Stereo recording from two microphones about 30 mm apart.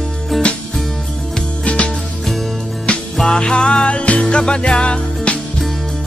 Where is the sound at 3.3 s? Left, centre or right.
Left.